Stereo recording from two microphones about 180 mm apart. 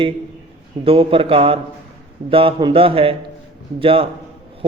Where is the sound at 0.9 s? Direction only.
30° right (ahead or behind).